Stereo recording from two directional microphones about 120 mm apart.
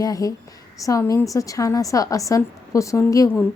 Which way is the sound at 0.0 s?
30° left (ahead or behind).